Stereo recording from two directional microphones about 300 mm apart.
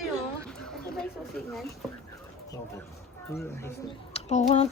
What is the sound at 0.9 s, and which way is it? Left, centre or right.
Speech, centre.